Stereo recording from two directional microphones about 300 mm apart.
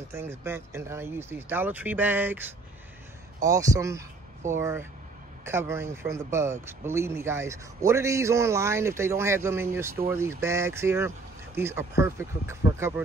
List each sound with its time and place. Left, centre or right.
0.1 s a man's voice: centre
3.4 s a man's voice: centre